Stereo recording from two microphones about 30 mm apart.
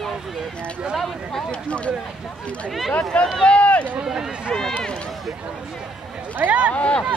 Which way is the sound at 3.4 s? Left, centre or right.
Left.